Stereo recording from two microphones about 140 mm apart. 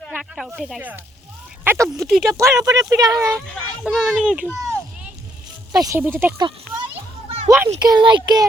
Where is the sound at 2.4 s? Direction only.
25° right (ahead or behind).